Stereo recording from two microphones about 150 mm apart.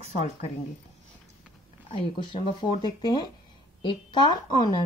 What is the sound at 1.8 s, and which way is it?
A woman's voice, 35° left (ahead or behind).